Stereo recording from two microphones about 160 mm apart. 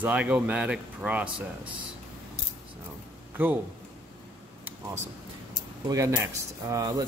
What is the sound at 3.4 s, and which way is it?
Speech, 10° right (ahead or behind).